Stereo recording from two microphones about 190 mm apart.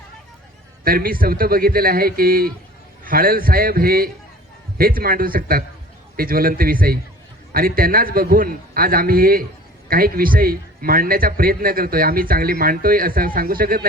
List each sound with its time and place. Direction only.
0.9 s a man's voice: 50° right (ahead or behind)